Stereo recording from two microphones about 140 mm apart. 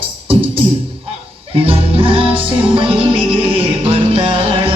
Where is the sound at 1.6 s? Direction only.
40° right (ahead or behind).